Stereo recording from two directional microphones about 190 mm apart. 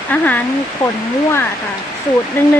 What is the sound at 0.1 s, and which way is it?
Speech, 10° left (ahead or behind).